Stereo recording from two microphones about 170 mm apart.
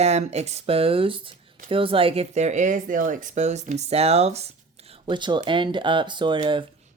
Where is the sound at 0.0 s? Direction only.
40° right (ahead or behind).